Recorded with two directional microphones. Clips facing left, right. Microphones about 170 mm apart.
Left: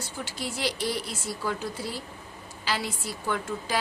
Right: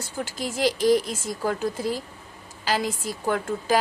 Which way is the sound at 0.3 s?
45° right (ahead or behind).